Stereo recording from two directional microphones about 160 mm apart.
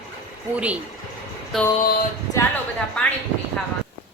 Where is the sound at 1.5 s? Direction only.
Centre (ahead or behind).